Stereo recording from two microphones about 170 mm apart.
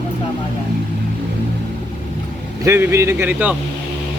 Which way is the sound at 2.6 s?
15° right (ahead or behind).